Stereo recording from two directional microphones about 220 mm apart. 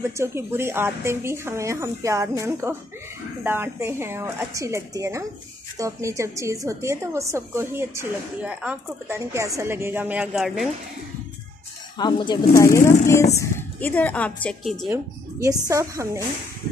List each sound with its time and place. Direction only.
0.0 s a woman's voice: 10° right (ahead or behind)
12.0 s a woman's voice: 20° left (ahead or behind); by 14.9 s centre (ahead or behind)
15.4 s a woman's voice: 15° right (ahead or behind)